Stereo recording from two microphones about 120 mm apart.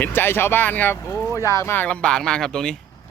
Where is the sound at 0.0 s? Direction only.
15° left (ahead or behind).